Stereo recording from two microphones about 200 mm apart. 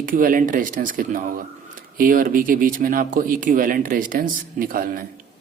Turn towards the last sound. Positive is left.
turn(degrees=-45)  # may be behind; listen again after turning